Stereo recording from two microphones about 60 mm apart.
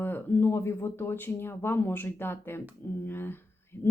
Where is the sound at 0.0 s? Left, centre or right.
Left.